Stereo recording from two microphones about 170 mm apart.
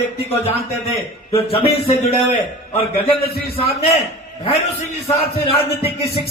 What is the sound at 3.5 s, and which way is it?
A man's voice, 35° left (ahead or behind).